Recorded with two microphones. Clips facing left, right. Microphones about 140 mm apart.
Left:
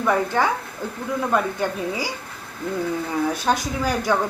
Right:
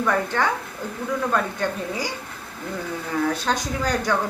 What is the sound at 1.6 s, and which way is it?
Speech, 10° left (ahead or behind).